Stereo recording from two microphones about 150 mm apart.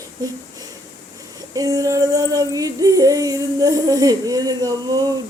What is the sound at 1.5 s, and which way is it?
Speech, 25° right (ahead or behind).